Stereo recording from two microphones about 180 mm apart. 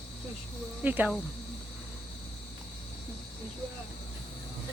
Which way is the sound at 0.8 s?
10° right (ahead or behind).